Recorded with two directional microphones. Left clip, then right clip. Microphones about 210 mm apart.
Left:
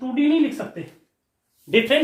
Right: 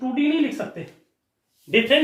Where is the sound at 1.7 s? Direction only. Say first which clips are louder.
Left 1 dB; 25° left (ahead or behind).